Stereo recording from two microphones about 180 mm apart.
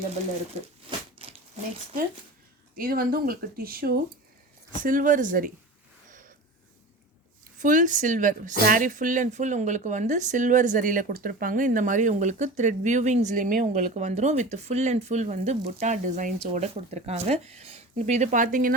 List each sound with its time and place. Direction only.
0.9 s a sound: 30° right (ahead or behind)
2.7 s a woman's voice: 55° right (ahead or behind)
7.6 s a woman's voice: 45° right (ahead or behind)